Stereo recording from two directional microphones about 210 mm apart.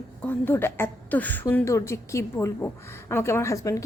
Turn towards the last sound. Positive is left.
turn(degrees=15)  # may be behind; listen again after turning